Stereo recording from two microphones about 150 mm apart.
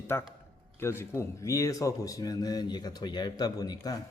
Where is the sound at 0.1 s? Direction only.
15° left (ahead or behind).